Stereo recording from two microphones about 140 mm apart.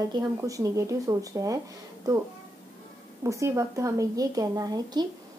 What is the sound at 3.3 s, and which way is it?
Speech, 20° right (ahead or behind).